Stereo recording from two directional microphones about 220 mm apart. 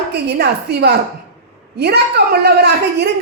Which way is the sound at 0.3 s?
45° right (ahead or behind).